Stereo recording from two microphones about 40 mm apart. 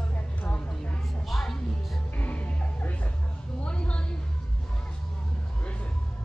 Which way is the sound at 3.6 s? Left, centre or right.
Left.